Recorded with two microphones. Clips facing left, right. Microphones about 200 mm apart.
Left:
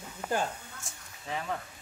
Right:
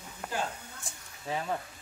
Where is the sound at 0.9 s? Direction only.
30° right (ahead or behind).